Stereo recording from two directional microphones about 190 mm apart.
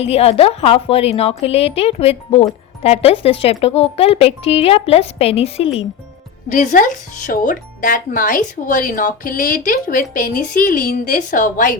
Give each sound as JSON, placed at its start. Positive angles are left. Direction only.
{"t": 0.0, "sound": "speech", "side_deg": 30}
{"t": 6.5, "sound": "speech", "side_deg": 40}